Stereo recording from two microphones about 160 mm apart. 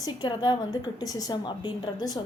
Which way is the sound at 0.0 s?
25° left (ahead or behind).